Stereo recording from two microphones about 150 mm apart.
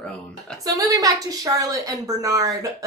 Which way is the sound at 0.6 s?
25° right (ahead or behind).